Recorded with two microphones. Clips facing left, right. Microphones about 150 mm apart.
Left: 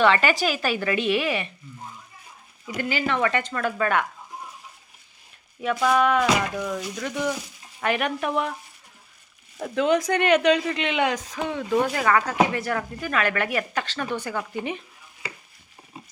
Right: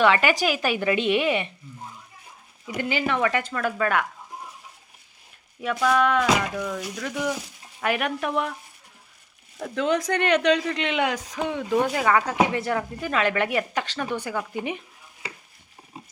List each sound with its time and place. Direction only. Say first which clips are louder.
0.0 s speech: even; 10° right (ahead or behind)
2.7 s speech: even; 15° right (ahead or behind)
3.2 s speech: even; 5° right (ahead or behind)
5.8 s music: even; 5° left (ahead or behind)
6.7 s speech: left 1 dB; centre (ahead or behind)
9.6 s speech: left 2 dB; 15° left (ahead or behind); by 14.8 s 10° right (ahead or behind)